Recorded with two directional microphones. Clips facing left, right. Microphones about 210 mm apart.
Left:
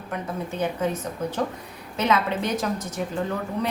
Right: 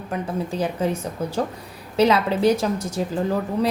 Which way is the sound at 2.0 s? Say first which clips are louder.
Right 5 dB; 35° right (ahead or behind).